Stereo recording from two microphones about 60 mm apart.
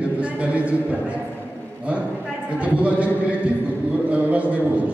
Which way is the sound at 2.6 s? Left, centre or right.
Right.